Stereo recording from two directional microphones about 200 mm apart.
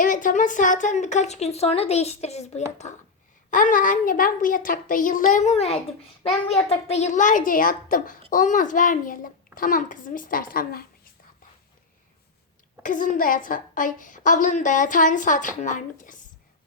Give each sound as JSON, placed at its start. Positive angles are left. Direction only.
{"t": 0.0, "sound": "a woman's voice", "side_deg": 40}
{"t": 12.8, "sound": "a woman's voice", "side_deg": 40}